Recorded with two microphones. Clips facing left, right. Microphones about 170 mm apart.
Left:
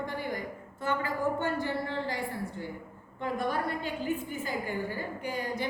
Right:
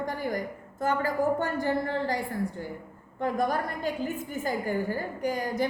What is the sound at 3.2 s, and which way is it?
A woman's voice, 45° right (ahead or behind).